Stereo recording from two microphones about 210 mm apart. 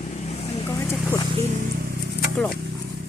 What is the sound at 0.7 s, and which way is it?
Vehicle, 10° left (ahead or behind).